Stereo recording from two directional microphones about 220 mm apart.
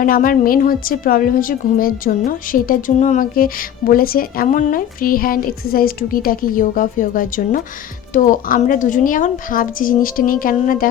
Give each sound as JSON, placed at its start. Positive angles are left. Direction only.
{"t": 0.0, "sound": "a woman's voice", "side_deg": 40}